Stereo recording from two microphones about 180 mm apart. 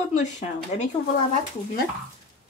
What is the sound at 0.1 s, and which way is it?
Speech, 40° left (ahead or behind).